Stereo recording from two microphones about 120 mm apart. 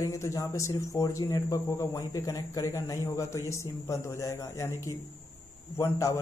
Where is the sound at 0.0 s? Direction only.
25° left (ahead or behind).